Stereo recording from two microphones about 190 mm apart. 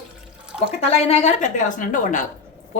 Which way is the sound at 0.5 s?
35° left (ahead or behind).